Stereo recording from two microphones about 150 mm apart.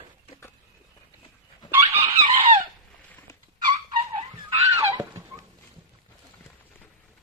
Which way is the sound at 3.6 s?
35° right (ahead or behind).